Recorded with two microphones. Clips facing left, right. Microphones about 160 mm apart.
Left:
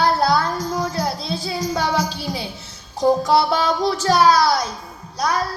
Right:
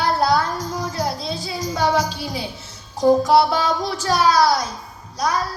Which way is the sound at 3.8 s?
25° left (ahead or behind).